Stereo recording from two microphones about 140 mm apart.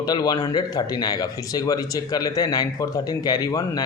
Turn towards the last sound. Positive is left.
turn(degrees=25)  # may be behind; listen again after turning